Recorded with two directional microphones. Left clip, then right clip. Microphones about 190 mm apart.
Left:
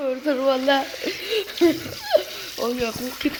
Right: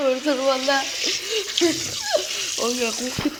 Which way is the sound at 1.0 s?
25° left (ahead or behind).